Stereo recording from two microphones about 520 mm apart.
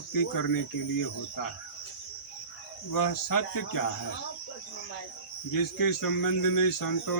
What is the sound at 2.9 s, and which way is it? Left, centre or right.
Speech, left.